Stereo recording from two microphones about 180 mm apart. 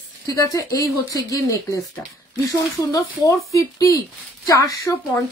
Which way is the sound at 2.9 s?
20° left (ahead or behind).